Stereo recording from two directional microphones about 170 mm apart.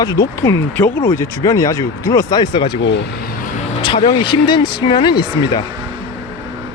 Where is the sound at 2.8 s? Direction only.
85° left.